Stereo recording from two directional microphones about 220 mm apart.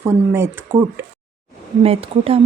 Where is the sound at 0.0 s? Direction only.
10° right (ahead or behind).